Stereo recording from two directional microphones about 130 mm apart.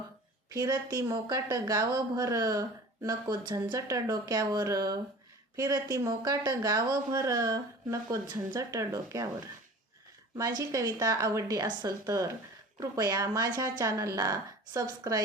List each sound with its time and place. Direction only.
0.5 s a woman's voice: 35° right (ahead or behind)
10.6 s speech: 25° right (ahead or behind)